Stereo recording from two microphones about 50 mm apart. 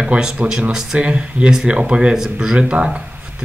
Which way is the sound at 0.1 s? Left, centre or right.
Centre.